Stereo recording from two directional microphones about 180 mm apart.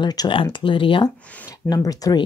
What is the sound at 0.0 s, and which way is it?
Speech, 25° left (ahead or behind).